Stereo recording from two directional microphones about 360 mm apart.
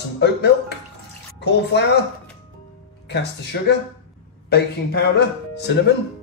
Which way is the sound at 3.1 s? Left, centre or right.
Left.